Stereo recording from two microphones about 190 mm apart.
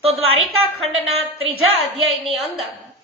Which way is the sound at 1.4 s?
30° right (ahead or behind).